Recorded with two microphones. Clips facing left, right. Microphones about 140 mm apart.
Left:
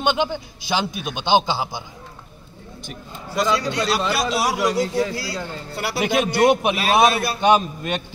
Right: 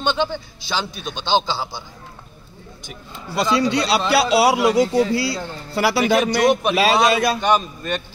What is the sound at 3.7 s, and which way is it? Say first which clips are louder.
Speech: right 4 dB; 90° right.